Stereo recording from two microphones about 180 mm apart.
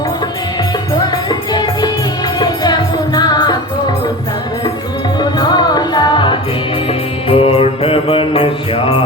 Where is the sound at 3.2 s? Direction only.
25° left (ahead or behind).